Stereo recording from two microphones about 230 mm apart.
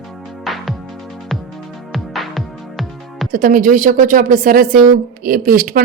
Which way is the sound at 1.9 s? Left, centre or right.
Centre.